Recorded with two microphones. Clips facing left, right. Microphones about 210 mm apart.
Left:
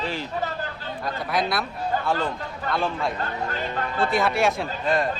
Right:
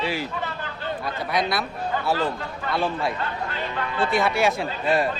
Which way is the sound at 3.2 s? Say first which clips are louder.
Left 1 dB; 45° left (ahead or behind).